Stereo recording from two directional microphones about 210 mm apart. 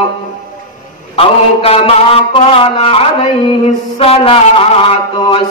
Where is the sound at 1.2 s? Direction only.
25° left (ahead or behind).